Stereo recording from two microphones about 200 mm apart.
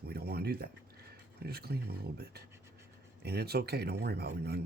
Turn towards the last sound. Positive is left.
turn(degrees=-55)  # may be behind; listen again after turning